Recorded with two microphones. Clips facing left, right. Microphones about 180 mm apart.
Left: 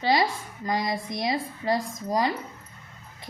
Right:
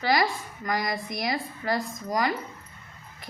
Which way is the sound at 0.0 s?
25° left (ahead or behind).